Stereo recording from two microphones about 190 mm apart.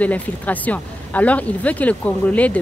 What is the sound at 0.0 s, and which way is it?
Speech, 10° left (ahead or behind).